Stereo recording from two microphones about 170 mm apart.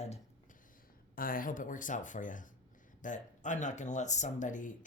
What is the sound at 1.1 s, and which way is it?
Speech, 55° left (ahead or behind).